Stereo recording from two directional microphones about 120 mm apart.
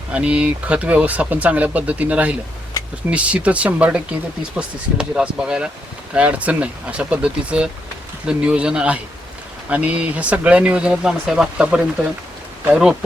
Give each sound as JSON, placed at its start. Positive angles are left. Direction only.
{"t": 0.1, "sound": "speech", "side_deg": -10}
{"t": 2.8, "sound": "a sound", "side_deg": 30}
{"t": 3.1, "sound": "speech", "side_deg": -10}